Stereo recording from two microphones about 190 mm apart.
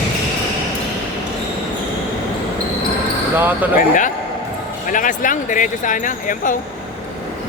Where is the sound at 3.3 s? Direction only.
10° right (ahead or behind).